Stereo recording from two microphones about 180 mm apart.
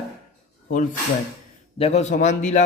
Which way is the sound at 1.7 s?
35° left (ahead or behind).